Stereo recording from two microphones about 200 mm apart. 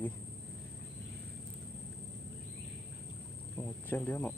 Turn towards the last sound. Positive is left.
turn(degrees=10)  # may be behind; listen again after turning